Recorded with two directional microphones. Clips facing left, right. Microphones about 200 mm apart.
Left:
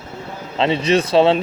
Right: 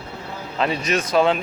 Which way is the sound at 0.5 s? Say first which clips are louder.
Left 6 dB; 25° left (ahead or behind).